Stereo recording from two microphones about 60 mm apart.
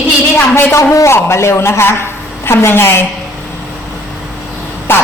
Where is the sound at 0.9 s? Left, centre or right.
Left.